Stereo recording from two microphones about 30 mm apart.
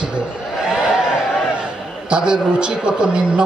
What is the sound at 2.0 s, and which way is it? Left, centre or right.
A man's voice, right.